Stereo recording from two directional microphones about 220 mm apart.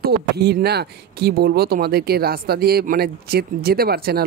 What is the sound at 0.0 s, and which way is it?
Speech, 45° right (ahead or behind).